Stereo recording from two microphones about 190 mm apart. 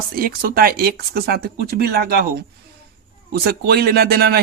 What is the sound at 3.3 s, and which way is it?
Speech, 55° right (ahead or behind).